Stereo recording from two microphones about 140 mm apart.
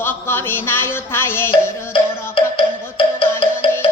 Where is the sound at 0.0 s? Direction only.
15° left (ahead or behind).